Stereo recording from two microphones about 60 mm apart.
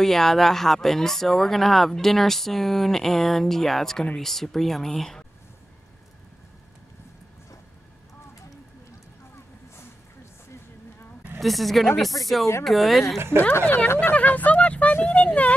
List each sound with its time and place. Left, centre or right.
0.0 s speech: centre
11.3 s speech: centre
13.4 s speech: left